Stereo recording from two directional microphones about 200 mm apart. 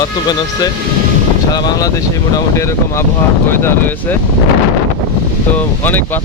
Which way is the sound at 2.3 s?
15° left (ahead or behind).